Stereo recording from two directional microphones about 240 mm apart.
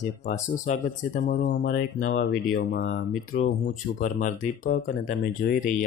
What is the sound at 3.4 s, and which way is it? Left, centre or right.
Speech, left.